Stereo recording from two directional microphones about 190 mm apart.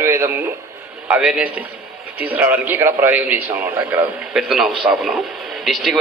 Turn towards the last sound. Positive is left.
turn(degrees=0)  # may be behind; listen again after turning